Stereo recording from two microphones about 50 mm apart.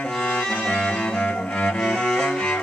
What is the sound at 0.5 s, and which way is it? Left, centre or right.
Music, left.